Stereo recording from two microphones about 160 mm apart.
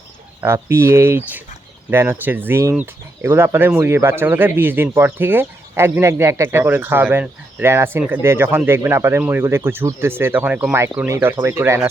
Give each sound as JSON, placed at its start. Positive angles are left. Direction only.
{"t": 0.4, "sound": "speech", "side_deg": -15}